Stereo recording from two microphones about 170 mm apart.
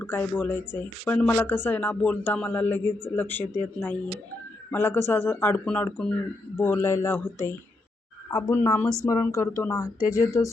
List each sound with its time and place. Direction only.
0.0 s speech: 10° left (ahead or behind)